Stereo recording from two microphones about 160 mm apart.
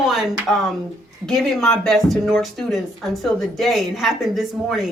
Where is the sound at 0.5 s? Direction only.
Centre (ahead or behind).